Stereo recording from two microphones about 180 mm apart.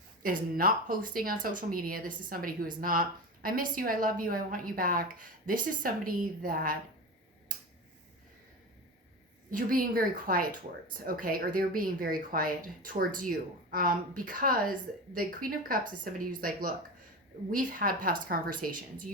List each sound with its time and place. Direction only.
0.2 s speech: 50° right (ahead or behind)
9.5 s speech: 50° right (ahead or behind)